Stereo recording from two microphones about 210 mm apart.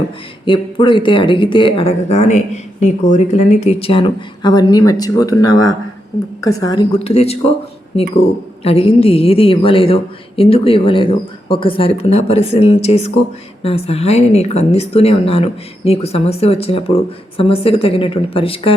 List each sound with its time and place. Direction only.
0.4 s speech: 25° left (ahead or behind)
8.6 s speech: 30° left (ahead or behind)